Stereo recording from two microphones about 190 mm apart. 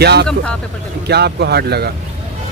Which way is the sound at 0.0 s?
60° right (ahead or behind).